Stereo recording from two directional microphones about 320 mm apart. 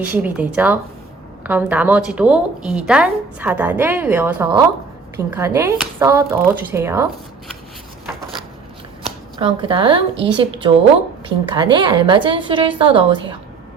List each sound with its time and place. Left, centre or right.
0.0 s a woman's voice: centre
9.0 s speech: centre